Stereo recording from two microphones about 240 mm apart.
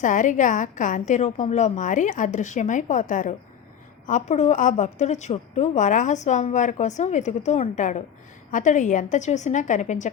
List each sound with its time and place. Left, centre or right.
0.0 s a woman's voice: left